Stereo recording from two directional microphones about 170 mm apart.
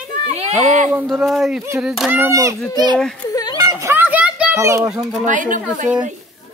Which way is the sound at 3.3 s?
20° left (ahead or behind).